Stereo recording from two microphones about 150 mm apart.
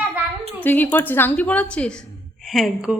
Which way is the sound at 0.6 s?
10° left (ahead or behind).